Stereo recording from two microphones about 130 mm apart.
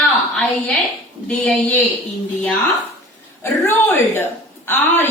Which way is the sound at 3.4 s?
15° left (ahead or behind).